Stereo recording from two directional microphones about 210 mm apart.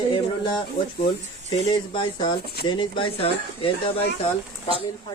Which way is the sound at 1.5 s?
25° left (ahead or behind).